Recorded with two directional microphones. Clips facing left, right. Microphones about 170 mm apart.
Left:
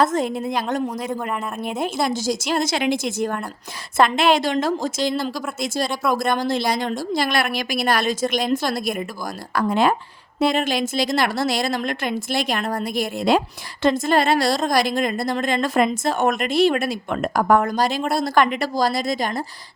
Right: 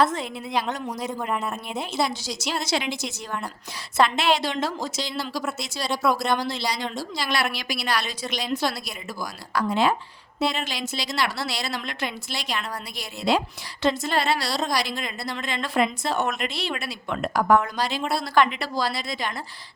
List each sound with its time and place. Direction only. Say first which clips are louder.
0.0 s a woman's voice: left 4 dB; 45° left (ahead or behind)